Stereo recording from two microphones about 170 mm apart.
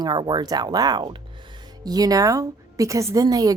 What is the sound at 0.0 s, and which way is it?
A woman's voice, 25° right (ahead or behind).